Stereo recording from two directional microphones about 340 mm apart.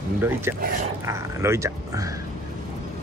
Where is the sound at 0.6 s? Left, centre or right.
Right.